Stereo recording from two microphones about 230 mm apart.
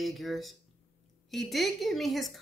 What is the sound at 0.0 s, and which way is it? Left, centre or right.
Speech, centre.